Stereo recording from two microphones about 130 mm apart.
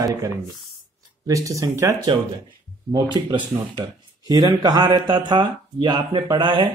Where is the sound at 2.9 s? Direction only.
40° right (ahead or behind).